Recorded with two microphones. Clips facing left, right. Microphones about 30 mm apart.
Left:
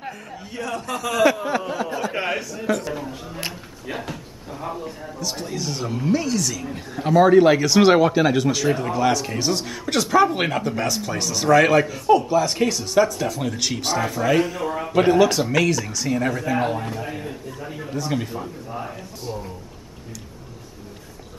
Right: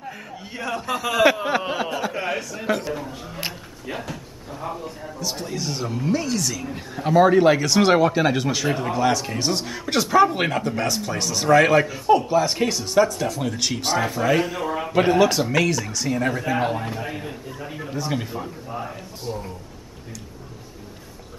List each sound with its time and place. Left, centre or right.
0.5 s a man's voice: centre
2.2 s a man's voice: left
2.5 s a man's voice: centre
2.9 s a man's voice: centre